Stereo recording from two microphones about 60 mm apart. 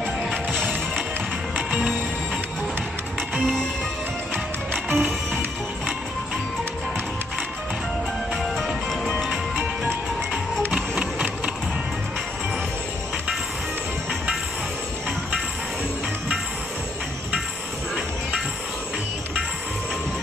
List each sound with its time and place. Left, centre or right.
4.8 s music: centre
8.4 s music: centre
10.7 s music: centre